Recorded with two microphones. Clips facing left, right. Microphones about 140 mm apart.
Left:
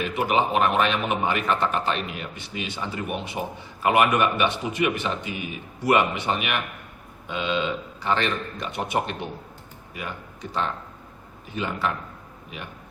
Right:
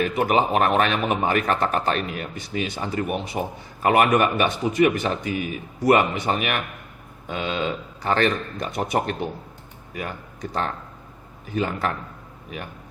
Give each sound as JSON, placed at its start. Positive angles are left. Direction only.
{"t": 0.0, "sound": "a man's voice", "side_deg": -45}